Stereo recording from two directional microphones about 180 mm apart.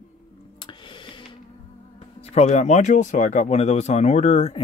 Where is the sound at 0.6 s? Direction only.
25° left (ahead or behind).